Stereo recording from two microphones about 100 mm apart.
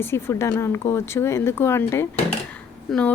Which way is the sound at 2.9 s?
Centre (ahead or behind).